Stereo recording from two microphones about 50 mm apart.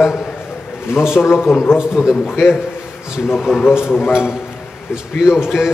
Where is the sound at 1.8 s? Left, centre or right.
Centre.